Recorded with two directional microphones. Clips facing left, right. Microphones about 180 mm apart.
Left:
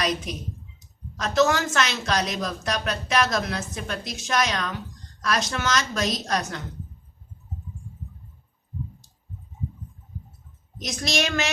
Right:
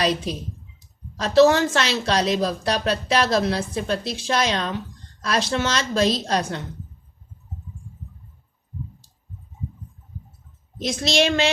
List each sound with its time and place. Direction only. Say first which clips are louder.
0.0 s a woman's voice: right 4 dB; 30° right (ahead or behind)
10.8 s a woman's voice: right 6 dB; 30° right (ahead or behind)